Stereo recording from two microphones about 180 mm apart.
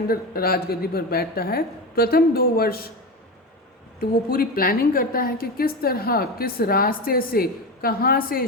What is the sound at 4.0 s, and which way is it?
A woman's voice, 55° left (ahead or behind).